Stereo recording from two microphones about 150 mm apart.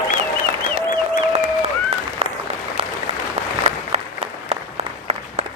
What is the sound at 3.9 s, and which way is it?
Applause, 45° right (ahead or behind).